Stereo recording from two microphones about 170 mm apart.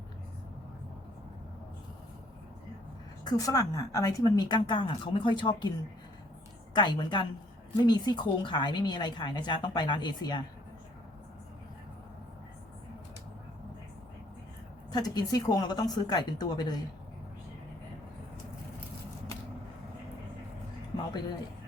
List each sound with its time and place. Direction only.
3.2 s speech: 20° left (ahead or behind)
6.7 s speech: 25° left (ahead or behind)
14.9 s speech: 25° left (ahead or behind)